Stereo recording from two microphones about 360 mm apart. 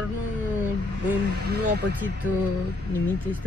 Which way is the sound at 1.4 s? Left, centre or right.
Right.